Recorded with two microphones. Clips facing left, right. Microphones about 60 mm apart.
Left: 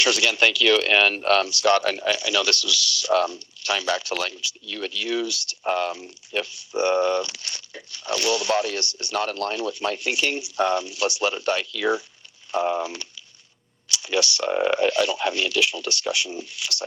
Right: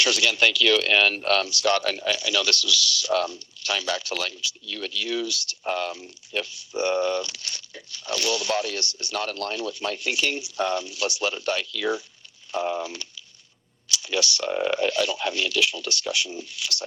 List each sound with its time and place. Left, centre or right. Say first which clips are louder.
0.0 s speech: left 1 dB; left